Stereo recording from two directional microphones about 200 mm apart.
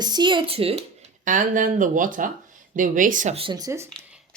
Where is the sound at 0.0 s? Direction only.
20° right (ahead or behind).